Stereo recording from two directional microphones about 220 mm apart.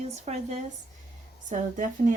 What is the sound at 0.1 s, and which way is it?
Speech, 30° right (ahead or behind).